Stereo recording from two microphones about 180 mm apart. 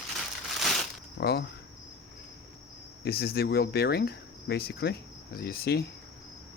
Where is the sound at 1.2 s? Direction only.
60° left (ahead or behind).